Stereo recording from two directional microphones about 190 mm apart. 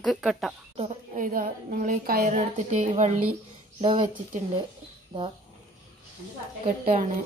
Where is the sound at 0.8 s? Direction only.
45° right (ahead or behind).